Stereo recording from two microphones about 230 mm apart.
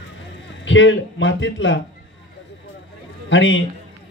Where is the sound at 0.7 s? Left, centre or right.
Left.